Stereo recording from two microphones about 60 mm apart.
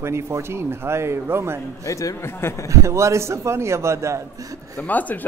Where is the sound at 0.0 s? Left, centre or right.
Right.